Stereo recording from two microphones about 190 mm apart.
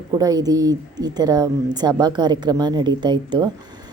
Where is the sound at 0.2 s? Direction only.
20° right (ahead or behind).